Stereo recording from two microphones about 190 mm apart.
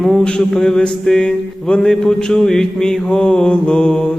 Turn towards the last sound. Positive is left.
turn(degrees=5)  # may be behind; listen again after turning